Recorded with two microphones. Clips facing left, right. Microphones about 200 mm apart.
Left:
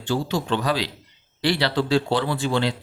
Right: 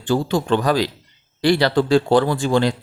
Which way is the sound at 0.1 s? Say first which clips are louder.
Right 5 dB; 50° right (ahead or behind).